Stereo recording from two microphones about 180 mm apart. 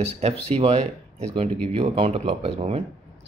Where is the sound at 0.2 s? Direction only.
35° right (ahead or behind).